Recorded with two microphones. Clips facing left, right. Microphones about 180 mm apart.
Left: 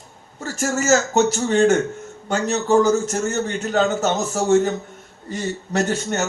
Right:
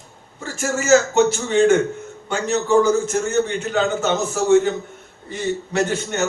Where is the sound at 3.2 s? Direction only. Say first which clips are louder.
Right 2 dB; 40° left (ahead or behind).